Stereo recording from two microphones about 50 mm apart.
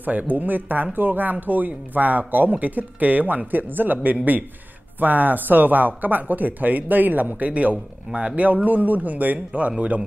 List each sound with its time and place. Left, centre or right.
0.0 s speech: right